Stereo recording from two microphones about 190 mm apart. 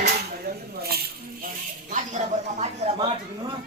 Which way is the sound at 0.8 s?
55° right (ahead or behind).